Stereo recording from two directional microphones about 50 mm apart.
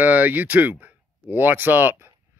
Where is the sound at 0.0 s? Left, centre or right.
Right.